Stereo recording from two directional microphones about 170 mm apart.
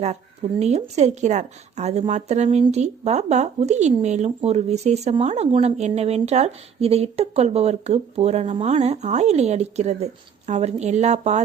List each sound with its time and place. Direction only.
0.6 s a woman's voice: 40° right (ahead or behind)